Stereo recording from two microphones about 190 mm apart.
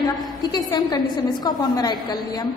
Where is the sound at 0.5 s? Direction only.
20° left (ahead or behind).